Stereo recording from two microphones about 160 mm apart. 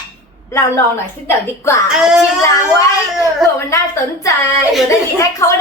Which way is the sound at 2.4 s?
20° left (ahead or behind).